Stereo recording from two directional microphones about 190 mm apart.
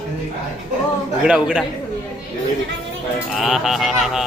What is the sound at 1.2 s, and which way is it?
Mantra, 5° right (ahead or behind).